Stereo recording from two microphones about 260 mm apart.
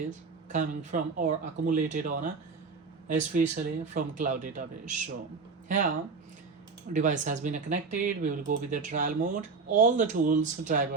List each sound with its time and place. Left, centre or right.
0.5 s speech: right
3.3 s speech: right
6.9 s speech: right